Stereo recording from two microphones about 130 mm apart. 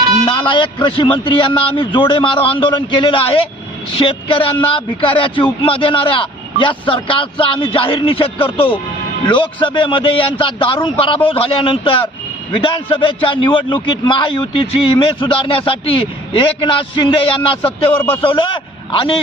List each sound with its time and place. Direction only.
0.3 s a man's voice: 40° left (ahead or behind)